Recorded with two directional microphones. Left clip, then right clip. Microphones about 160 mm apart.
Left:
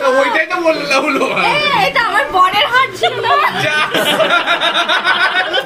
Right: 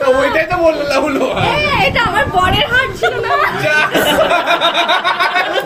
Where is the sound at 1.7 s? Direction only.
75° left (ahead or behind).